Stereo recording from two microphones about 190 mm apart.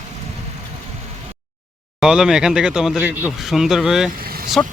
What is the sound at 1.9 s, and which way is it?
Speech, 5° right (ahead or behind).